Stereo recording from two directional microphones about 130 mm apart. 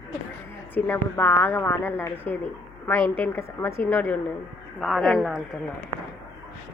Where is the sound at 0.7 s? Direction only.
15° left (ahead or behind).